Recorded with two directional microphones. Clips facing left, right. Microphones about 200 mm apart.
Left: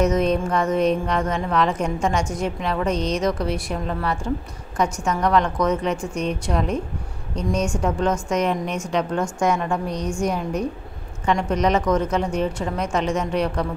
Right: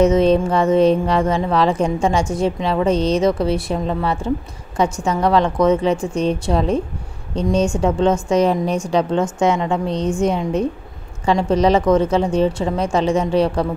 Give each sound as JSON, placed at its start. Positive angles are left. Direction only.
{"t": 0.0, "sound": "a woman's voice", "side_deg": -30}